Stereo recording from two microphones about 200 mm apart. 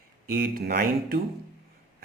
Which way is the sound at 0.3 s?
50° right (ahead or behind).